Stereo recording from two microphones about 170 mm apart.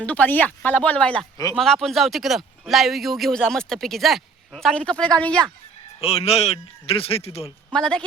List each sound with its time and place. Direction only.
0.0 s speech: 10° left (ahead or behind)
6.0 s speech: 35° left (ahead or behind)
7.7 s speech: 5° left (ahead or behind)